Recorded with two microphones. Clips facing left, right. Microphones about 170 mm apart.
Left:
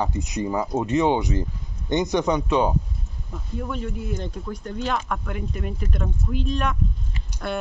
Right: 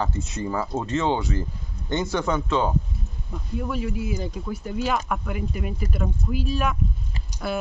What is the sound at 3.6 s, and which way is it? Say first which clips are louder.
Speech: right 2 dB; 5° right (ahead or behind).